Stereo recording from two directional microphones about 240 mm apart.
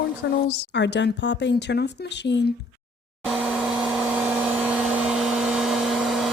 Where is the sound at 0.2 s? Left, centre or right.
Left.